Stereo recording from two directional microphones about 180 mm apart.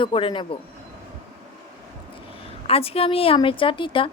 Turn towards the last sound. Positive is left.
turn(degrees=30)  # may be behind; listen again after turning